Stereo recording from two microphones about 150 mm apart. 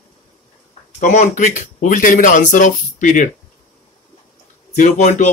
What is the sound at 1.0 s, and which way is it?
Speech, 55° left (ahead or behind).